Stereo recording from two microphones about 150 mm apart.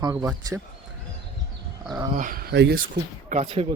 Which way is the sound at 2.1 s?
65° right (ahead or behind).